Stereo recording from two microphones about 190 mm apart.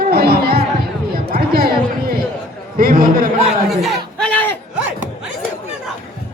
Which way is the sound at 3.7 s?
5° left (ahead or behind).